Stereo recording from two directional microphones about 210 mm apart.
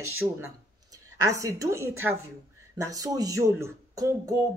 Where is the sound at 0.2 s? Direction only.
20° right (ahead or behind).